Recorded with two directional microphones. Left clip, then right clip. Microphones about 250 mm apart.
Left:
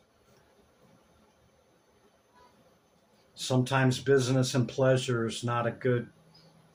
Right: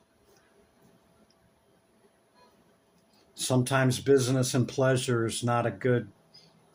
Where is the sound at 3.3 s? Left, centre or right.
Right.